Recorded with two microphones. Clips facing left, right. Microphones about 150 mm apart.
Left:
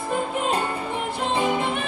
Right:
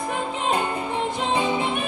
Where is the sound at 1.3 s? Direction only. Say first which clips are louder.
Left 2 dB; 20° right (ahead or behind).